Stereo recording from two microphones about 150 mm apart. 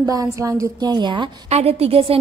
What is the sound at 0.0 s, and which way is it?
A woman's voice, 25° right (ahead or behind).